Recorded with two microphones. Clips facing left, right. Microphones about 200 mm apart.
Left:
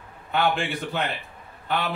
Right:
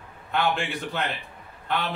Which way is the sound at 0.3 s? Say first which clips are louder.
Left 2 dB; centre (ahead or behind).